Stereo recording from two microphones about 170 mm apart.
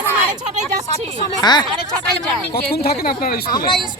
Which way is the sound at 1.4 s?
25° left (ahead or behind).